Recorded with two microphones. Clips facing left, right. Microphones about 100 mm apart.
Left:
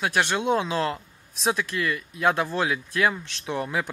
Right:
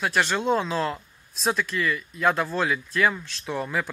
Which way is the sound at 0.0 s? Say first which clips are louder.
Even; 15° left (ahead or behind).